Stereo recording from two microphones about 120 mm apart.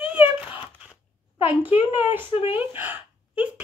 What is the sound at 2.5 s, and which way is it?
Speech, 15° right (ahead or behind).